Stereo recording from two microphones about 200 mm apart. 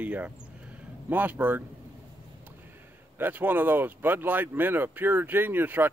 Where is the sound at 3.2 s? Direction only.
10° right (ahead or behind).